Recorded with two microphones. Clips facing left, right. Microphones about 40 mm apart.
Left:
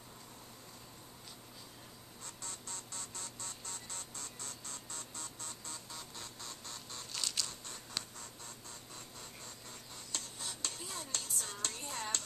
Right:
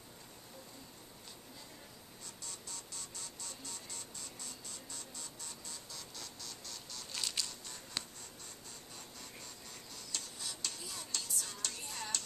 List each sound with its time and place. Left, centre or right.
2.2 s music: left
7.1 s crushing: centre
8.0 s a sound: centre
10.1 s stir: left